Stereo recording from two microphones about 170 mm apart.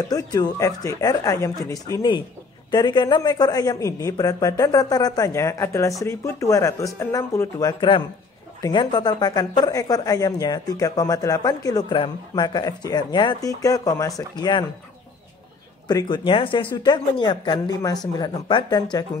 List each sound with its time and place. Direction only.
0.1 s speech: 20° left (ahead or behind)
15.9 s speech: 25° left (ahead or behind)